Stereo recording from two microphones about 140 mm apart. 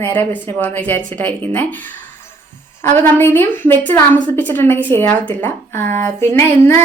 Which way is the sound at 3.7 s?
15° left (ahead or behind).